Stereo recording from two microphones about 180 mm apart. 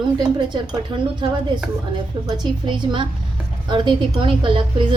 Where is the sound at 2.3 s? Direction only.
25° right (ahead or behind).